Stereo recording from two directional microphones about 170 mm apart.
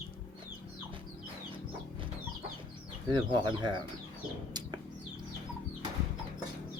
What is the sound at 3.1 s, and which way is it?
Speech, 25° right (ahead or behind).